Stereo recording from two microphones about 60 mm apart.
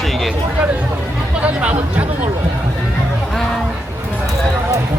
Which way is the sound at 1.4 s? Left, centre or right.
Right.